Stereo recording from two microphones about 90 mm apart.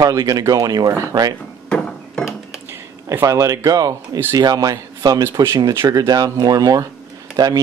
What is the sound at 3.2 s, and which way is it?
Speech, 35° right (ahead or behind).